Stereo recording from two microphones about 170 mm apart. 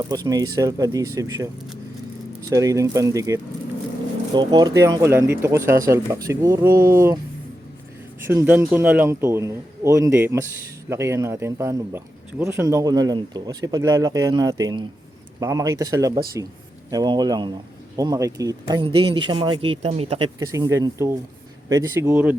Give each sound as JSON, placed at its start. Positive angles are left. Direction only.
{"t": 0.0, "sound": "speech", "side_deg": -20}
{"t": 2.5, "sound": "speech", "side_deg": -20}
{"t": 8.3, "sound": "speech", "side_deg": -15}
{"t": 20.5, "sound": "speech", "side_deg": -15}